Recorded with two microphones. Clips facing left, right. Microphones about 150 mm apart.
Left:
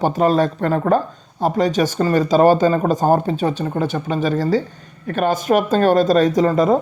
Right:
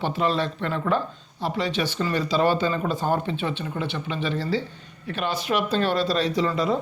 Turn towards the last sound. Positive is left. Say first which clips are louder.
# left 8 dB
turn(degrees=45)  # may be behind; listen again after turning